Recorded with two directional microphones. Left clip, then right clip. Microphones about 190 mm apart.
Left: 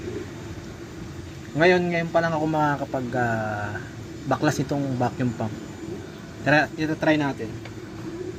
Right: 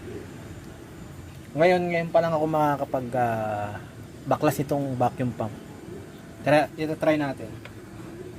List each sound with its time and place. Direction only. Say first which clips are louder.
1.5 s a man's voice: left 1 dB; 30° right (ahead or behind)